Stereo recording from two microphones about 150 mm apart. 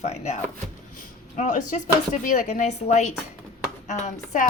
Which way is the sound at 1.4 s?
55° left (ahead or behind).